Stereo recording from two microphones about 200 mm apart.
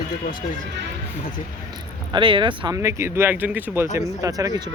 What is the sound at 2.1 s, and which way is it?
Speech, 25° right (ahead or behind).